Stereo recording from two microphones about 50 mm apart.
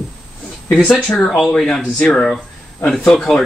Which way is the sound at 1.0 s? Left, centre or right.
Left.